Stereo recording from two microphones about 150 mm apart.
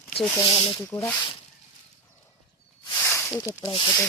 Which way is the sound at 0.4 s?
35° left (ahead or behind).